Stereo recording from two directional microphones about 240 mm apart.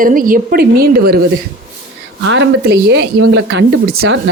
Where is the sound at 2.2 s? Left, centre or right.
Right.